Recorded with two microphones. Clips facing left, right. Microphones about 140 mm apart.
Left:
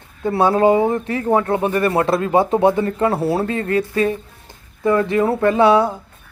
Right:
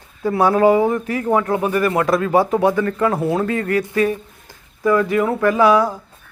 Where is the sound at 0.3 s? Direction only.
25° left (ahead or behind).